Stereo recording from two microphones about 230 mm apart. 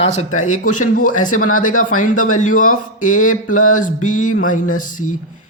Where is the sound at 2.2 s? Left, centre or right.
Left.